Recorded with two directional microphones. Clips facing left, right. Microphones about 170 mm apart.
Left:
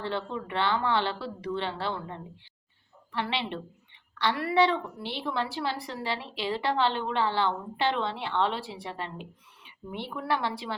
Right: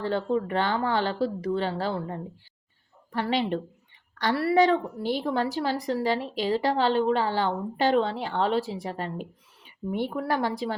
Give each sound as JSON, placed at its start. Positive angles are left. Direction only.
{"t": 0.0, "sound": "a woman's voice", "side_deg": -40}